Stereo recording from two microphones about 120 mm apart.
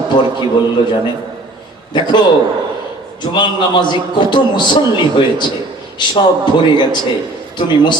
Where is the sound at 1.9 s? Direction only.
40° left (ahead or behind).